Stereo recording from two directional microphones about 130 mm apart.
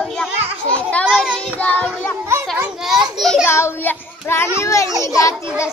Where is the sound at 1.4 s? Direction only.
10° left (ahead or behind).